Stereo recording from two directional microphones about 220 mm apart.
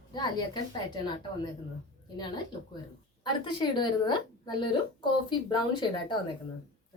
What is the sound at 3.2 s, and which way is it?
A woman's voice, 20° left (ahead or behind).